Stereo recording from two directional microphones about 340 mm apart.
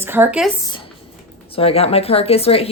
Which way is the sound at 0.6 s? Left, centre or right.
Centre.